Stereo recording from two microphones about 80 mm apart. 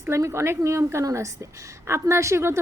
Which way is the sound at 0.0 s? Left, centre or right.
Right.